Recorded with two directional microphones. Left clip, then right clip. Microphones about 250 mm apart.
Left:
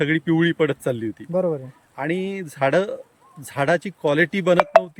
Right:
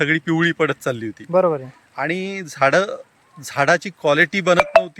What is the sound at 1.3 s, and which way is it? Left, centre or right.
Speech, centre.